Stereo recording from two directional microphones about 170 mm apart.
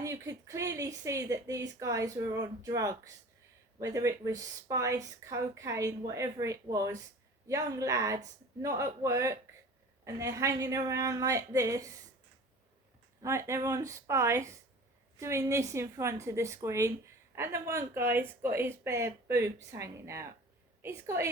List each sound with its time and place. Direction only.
0.0 s speech: 20° right (ahead or behind)
13.2 s speech: 15° right (ahead or behind)